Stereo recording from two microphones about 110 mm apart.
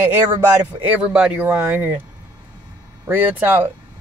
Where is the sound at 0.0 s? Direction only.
20° right (ahead or behind).